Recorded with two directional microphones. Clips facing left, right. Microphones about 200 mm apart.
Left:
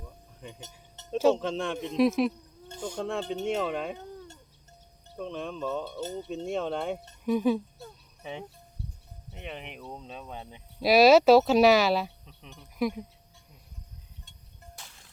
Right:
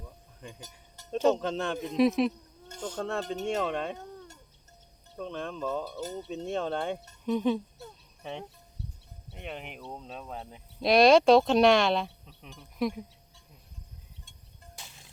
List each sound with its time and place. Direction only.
1.1 s speech: centre (ahead or behind)
14.8 s music: 20° right (ahead or behind)